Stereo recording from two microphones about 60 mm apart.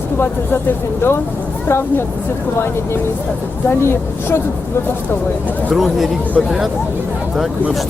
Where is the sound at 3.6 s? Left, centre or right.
Left.